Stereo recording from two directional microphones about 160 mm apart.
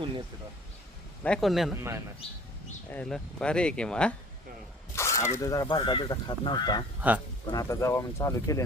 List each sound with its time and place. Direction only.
1.2 s speech: 5° left (ahead or behind)
1.7 s a man's voice: 15° right (ahead or behind)
2.9 s speech: 5° left (ahead or behind)
4.9 s speech: 15° left (ahead or behind)
7.0 s a man's voice: 10° right (ahead or behind)
7.4 s speech: 20° left (ahead or behind)